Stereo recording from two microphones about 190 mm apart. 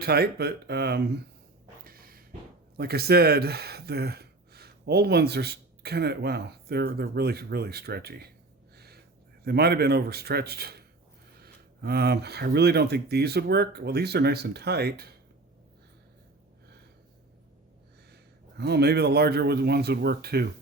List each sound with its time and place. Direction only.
0.0 s speech: 55° right (ahead or behind)
1.8 s a sound: 50° right (ahead or behind)
2.7 s speech: 55° right (ahead or behind)
8.7 s a sound: 55° right (ahead or behind)
9.4 s speech: 55° right (ahead or behind)
18.1 s a man's voice: 60° right (ahead or behind)